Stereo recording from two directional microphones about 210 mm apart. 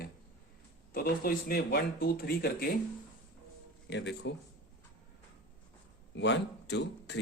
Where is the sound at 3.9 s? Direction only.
55° left (ahead or behind).